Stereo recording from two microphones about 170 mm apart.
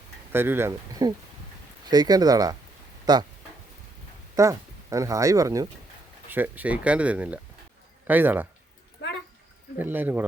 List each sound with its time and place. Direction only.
0.3 s speech: 15° right (ahead or behind)
4.4 s a man's voice: 20° right (ahead or behind)
9.7 s speech: 10° right (ahead or behind)